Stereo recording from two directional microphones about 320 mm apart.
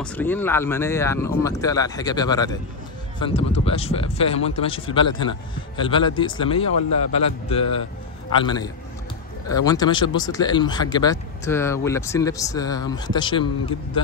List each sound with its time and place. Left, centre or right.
0.0 s speech: centre